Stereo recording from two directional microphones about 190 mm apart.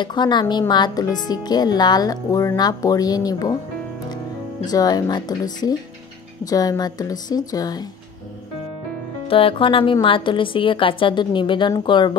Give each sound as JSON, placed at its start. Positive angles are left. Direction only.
{"t": 0.0, "sound": "speech", "side_deg": 25}
{"t": 4.6, "sound": "speech", "side_deg": 20}
{"t": 9.3, "sound": "speech", "side_deg": 30}